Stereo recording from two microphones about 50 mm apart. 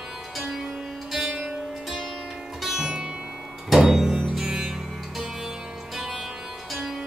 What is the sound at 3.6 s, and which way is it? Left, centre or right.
Music, centre.